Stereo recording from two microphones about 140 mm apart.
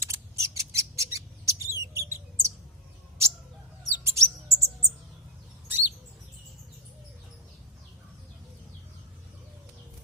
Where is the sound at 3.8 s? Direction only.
20° right (ahead or behind).